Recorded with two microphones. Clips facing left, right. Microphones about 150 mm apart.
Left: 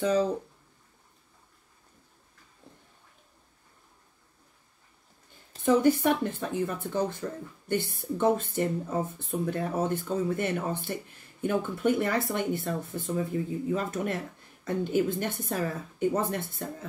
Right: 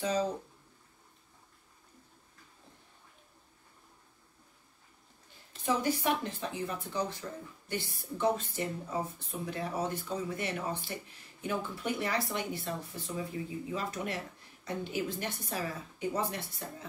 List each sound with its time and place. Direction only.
5.5 s speech: 55° left (ahead or behind)